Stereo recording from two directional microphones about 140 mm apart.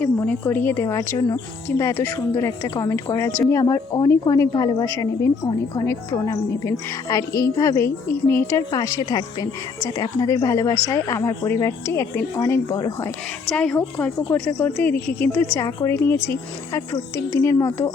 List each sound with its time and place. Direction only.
0.0 s a woman's voice: 15° left (ahead or behind)
13.5 s a woman's voice: 10° left (ahead or behind)